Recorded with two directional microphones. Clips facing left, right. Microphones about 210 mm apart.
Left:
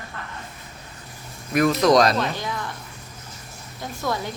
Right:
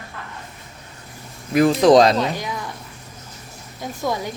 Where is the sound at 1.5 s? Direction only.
30° right (ahead or behind).